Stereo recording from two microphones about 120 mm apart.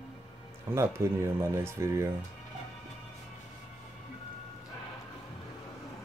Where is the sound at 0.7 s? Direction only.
20° right (ahead or behind).